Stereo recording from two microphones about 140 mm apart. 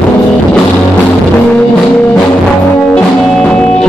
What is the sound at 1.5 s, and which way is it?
Music, 10° left (ahead or behind).